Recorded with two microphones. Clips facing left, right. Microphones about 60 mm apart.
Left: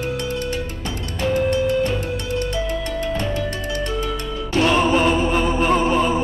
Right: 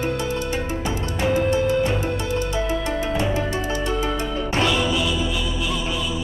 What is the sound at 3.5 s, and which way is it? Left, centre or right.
Music, left.